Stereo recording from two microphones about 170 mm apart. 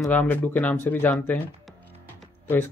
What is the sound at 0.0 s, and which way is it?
Speech, 10° left (ahead or behind).